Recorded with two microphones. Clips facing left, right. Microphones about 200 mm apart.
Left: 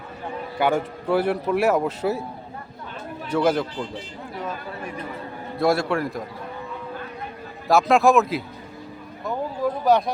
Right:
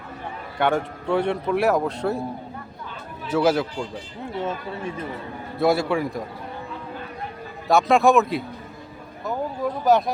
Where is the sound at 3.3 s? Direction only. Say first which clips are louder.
Right 1 dB; 5° right (ahead or behind).